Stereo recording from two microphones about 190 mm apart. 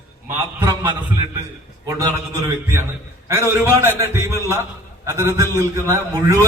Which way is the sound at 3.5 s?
15° right (ahead or behind).